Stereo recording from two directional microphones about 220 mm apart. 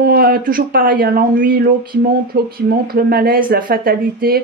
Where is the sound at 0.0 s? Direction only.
45° right (ahead or behind).